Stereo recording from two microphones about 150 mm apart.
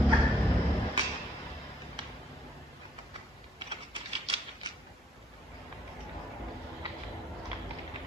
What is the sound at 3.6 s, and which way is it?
Typewriter, 40° right (ahead or behind).